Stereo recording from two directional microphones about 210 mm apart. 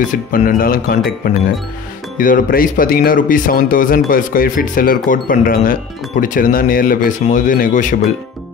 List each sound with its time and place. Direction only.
0.1 s speech: 40° left (ahead or behind)